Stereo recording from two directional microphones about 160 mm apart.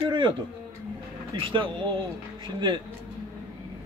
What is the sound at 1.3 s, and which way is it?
Speech, 30° right (ahead or behind).